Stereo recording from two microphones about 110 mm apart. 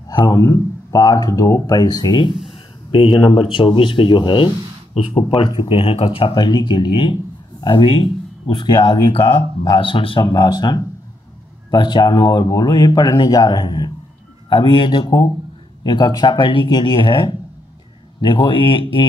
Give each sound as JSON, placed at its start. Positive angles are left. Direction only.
{"t": 0.1, "sound": "a sound", "side_deg": 45}
{"t": 0.4, "sound": "speech", "side_deg": 30}
{"t": 4.9, "sound": "speech", "side_deg": 60}
{"t": 6.3, "sound": "speech", "side_deg": 40}
{"t": 8.5, "sound": "speech", "side_deg": 45}